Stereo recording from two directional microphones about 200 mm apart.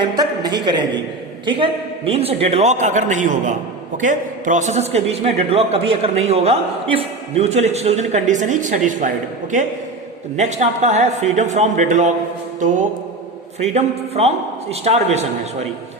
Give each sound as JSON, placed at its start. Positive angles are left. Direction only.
{"t": 0.0, "sound": "a woman's voice", "side_deg": -20}
{"t": 12.5, "sound": "mantra", "side_deg": -40}
{"t": 13.6, "sound": "a woman's voice", "side_deg": -30}